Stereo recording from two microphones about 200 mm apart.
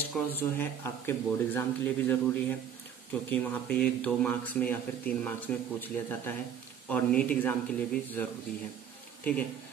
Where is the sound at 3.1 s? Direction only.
5° left (ahead or behind).